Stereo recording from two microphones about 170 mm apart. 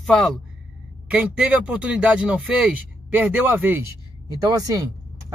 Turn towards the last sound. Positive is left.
turn(degrees=-20)  # may be behind; listen again after turning